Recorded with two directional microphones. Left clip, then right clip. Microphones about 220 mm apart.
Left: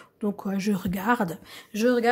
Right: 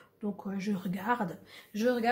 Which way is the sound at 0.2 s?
50° left (ahead or behind).